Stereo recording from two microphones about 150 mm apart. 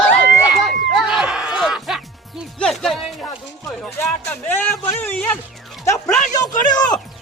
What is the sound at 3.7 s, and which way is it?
Speech, 15° left (ahead or behind).